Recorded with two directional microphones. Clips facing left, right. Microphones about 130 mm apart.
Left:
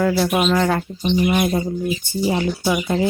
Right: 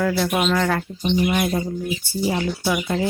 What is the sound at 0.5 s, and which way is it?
Speech, 25° left (ahead or behind).